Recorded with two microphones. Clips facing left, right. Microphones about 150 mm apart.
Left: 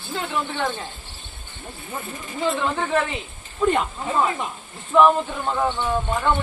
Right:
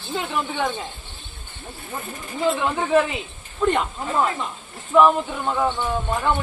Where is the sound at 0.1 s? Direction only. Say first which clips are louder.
Right 1 dB; 10° right (ahead or behind).